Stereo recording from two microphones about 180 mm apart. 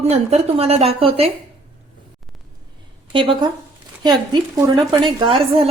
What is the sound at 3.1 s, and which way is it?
A woman's voice, 30° right (ahead or behind).